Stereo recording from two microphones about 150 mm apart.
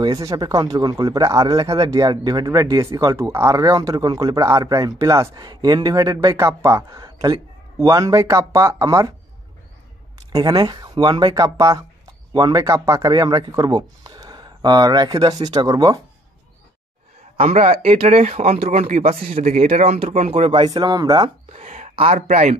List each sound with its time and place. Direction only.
0.0 s speech: 25° right (ahead or behind)
10.3 s speech: 25° right (ahead or behind)
17.4 s speech: 45° right (ahead or behind)
20.6 s speech: 30° right (ahead or behind)
21.5 s speech: 50° right (ahead or behind)